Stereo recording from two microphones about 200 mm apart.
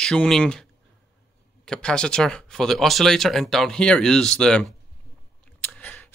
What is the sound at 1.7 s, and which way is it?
Speech, 5° left (ahead or behind).